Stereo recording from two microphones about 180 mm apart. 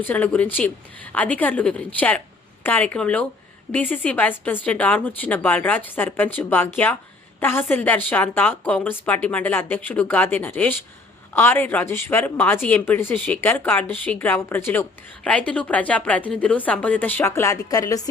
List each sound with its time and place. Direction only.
0.0 s speech: 10° left (ahead or behind)